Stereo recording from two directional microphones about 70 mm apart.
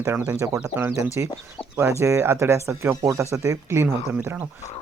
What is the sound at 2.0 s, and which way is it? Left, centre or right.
Speech, right.